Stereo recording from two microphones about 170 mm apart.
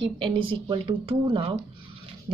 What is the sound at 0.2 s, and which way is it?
Speech, 30° right (ahead or behind).